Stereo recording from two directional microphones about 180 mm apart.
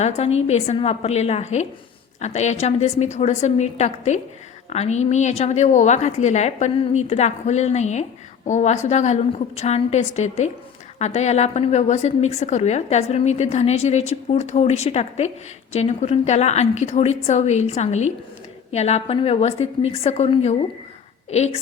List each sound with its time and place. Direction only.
0.0 s a woman's voice: 35° left (ahead or behind)